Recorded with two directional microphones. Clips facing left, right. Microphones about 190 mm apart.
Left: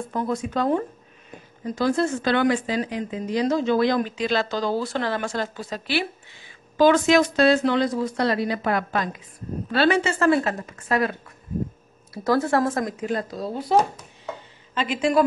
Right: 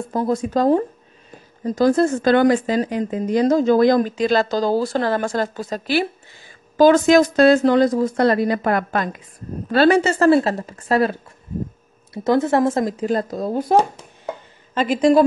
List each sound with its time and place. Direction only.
0.1 s a woman's voice: 35° right (ahead or behind)
12.1 s a woman's voice: 20° right (ahead or behind); by 15.2 s 40° right (ahead or behind)